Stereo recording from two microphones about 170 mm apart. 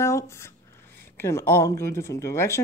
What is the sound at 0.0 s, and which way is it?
Writing, 15° left (ahead or behind).